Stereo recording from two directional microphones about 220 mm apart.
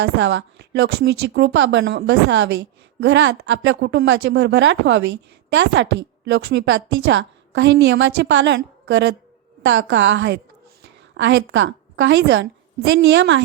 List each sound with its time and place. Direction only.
0.0 s a woman's voice: 55° right (ahead or behind)